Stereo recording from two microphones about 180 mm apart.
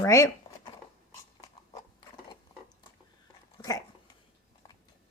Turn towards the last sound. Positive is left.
turn(degrees=25)  # may be behind; listen again after turning